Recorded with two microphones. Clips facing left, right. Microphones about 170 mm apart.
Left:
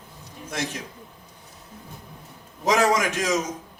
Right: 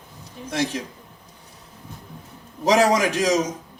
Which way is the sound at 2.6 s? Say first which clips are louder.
Right 3 dB; 30° right (ahead or behind).